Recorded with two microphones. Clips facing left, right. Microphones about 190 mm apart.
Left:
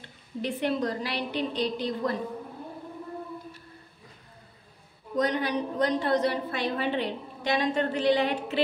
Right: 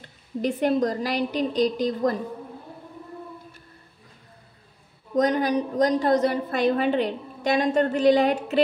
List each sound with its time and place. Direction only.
0.4 s a woman's voice: 45° right (ahead or behind)
5.1 s a woman's voice: 45° right (ahead or behind)